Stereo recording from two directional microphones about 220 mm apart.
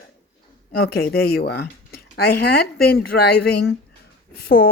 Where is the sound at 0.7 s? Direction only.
45° left (ahead or behind).